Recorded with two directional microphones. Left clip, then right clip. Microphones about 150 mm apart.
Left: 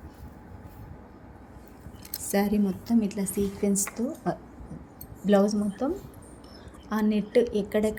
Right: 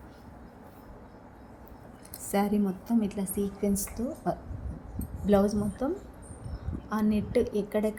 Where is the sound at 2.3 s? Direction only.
25° left (ahead or behind).